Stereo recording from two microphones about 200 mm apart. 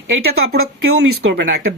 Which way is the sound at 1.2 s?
70° right (ahead or behind).